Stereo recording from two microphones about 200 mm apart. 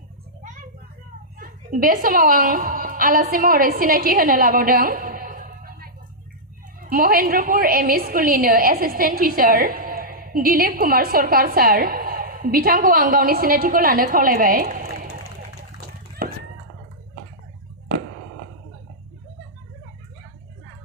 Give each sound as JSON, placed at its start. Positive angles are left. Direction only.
{"t": 1.4, "sound": "a woman's voice", "side_deg": -45}
{"t": 6.9, "sound": "a woman's voice", "side_deg": -45}